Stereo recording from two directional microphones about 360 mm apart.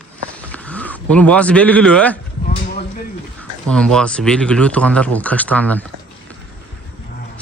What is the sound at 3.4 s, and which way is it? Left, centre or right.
Speech, centre.